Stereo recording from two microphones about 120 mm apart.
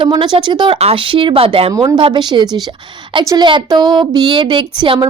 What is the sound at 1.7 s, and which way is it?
Speech, 25° right (ahead or behind).